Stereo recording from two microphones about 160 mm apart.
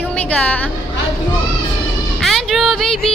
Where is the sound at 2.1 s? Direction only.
Centre (ahead or behind).